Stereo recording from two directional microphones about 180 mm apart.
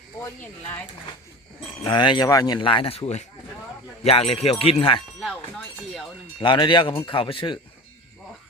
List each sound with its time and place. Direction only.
1.8 s speech: 25° left (ahead or behind)
5.2 s speech: centre (ahead or behind)
6.4 s speech: 25° left (ahead or behind)